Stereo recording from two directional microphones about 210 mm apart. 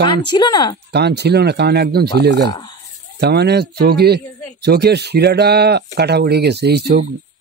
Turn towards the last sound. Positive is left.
turn(degrees=-50)  # may be behind; listen again after turning